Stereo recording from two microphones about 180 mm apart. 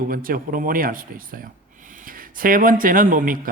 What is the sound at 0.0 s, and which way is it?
Speech, 50° right (ahead or behind).